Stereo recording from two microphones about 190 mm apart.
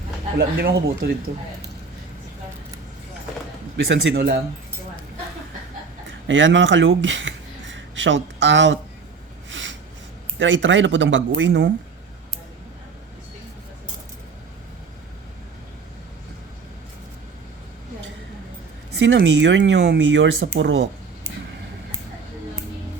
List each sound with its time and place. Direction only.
0.3 s speech: 60° right (ahead or behind)
3.8 s speech: 55° right (ahead or behind)
6.1 s speech: 75° right (ahead or behind)
9.5 s a sound: 75° right (ahead or behind)
10.3 s speech: 75° right (ahead or behind)
18.9 s speech: 70° right (ahead or behind)